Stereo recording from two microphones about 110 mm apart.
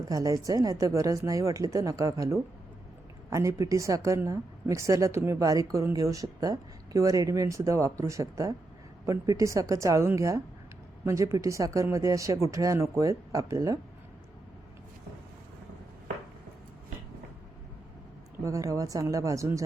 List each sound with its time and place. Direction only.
0.1 s a woman's voice: 35° right (ahead or behind)
18.4 s a woman's voice: 30° right (ahead or behind)